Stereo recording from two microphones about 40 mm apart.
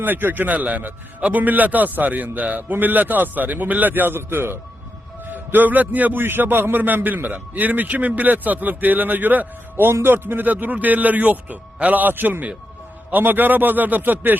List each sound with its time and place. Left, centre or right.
0.0 s a man's voice: right
5.2 s a man's voice: right
6.1 s a man's voice: right
9.8 s a man's voice: right